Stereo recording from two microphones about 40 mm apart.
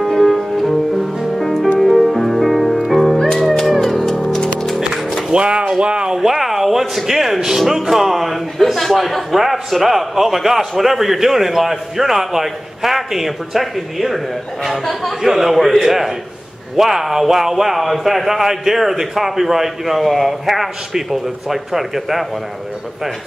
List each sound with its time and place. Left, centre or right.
0.0 s music: centre
5.3 s speech: right
6.1 s a man's voice: centre